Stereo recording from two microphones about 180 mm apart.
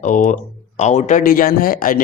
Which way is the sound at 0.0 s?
45° left (ahead or behind).